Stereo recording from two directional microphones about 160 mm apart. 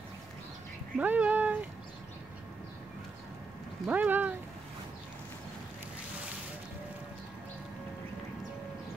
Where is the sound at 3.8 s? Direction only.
10° right (ahead or behind).